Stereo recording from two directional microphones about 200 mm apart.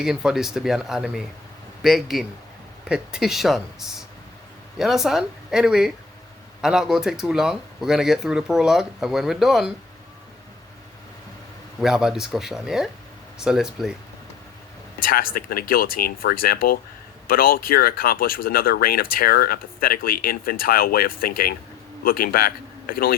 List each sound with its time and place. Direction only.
0.0 s speech: 5° right (ahead or behind)
11.8 s speech: centre (ahead or behind)
14.9 s a man's voice: 45° left (ahead or behind)